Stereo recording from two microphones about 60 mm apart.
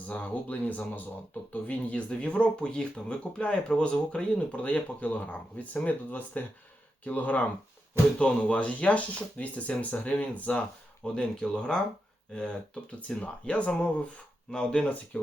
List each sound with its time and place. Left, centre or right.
0.1 s speech: left